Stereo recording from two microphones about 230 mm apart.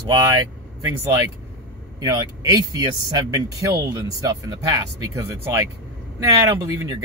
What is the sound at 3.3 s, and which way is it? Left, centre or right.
Speech, centre.